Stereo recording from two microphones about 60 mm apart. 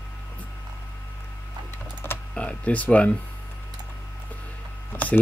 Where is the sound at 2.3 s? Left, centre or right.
Left.